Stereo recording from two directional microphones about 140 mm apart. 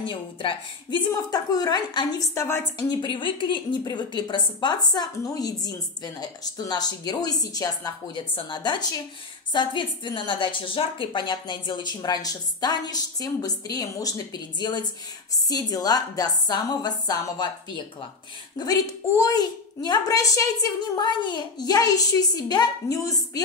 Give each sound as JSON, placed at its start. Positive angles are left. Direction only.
{"t": 0.0, "sound": "a woman's voice", "side_deg": 35}
{"t": 2.9, "sound": "a woman's voice", "side_deg": 35}